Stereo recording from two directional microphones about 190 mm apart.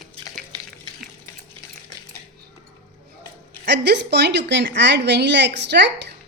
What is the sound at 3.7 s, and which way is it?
A woman's voice, 65° right (ahead or behind).